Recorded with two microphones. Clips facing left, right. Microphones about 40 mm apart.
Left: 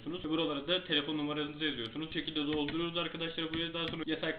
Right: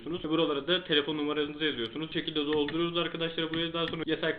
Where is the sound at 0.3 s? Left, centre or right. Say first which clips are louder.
Right 5 dB; centre.